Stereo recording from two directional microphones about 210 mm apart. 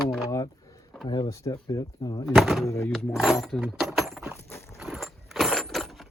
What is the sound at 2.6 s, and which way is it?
Speech, 15° left (ahead or behind).